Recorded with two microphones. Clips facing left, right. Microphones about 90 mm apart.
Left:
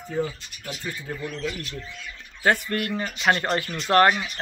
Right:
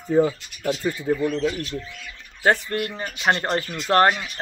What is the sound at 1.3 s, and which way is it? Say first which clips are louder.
Speech: right 7 dB; 25° right (ahead or behind).